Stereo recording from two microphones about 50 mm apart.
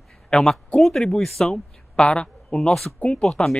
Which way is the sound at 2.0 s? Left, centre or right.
Centre.